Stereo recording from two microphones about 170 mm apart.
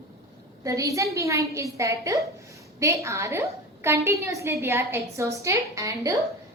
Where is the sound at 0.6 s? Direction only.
20° right (ahead or behind).